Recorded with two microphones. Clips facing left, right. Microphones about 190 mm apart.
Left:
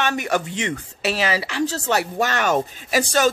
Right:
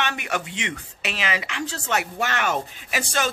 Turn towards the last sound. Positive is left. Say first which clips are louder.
# left 7 dB
turn(degrees=40)  # may be behind; listen again after turning